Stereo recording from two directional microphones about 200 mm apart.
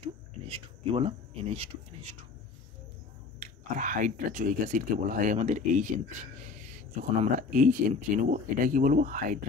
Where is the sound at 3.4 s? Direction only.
40° right (ahead or behind).